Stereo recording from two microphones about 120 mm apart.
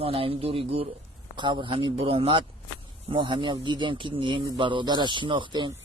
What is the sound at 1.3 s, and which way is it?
Speech, 40° right (ahead or behind).